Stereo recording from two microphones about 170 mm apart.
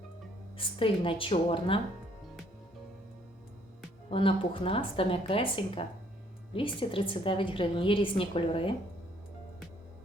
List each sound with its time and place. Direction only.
0.5 s a woman's voice: 30° left (ahead or behind)
4.1 s a woman's voice: 30° left (ahead or behind)